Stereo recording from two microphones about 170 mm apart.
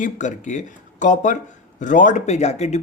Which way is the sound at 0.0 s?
45° left (ahead or behind).